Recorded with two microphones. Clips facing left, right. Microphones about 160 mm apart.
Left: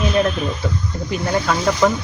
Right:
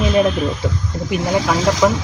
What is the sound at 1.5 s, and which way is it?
Speech, 90° right.